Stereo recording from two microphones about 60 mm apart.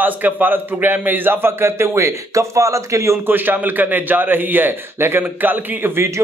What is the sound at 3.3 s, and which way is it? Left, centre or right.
A man's voice, right.